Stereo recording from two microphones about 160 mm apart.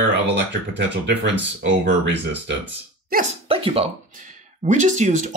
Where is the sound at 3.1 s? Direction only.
65° right (ahead or behind).